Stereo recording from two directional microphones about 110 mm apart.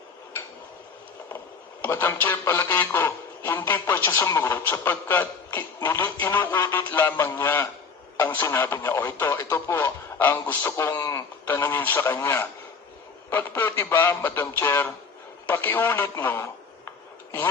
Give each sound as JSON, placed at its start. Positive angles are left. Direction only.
{"t": 1.8, "sound": "speech", "side_deg": 20}
{"t": 10.7, "sound": "speech", "side_deg": 30}
{"t": 11.4, "sound": "a man's voice", "side_deg": 20}